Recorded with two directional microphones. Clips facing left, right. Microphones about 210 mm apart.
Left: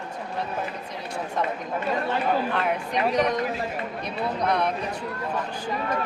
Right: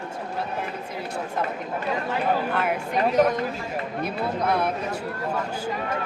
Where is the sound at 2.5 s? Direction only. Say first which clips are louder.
Right 1 dB; 5° right (ahead or behind).